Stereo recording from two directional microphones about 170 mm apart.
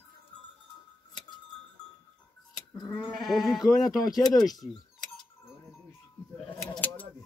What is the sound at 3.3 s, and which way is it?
Speech, centre (ahead or behind).